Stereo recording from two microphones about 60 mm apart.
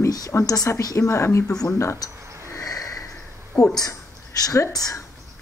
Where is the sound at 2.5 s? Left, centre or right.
Left.